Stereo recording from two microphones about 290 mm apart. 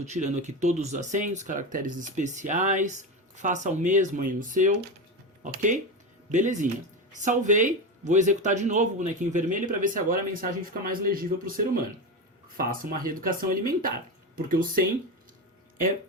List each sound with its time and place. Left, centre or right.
0.0 s speech: right